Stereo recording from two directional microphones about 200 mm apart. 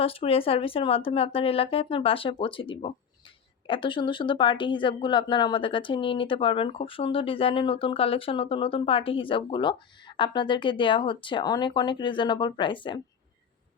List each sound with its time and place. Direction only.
0.0 s speech: 30° left (ahead or behind)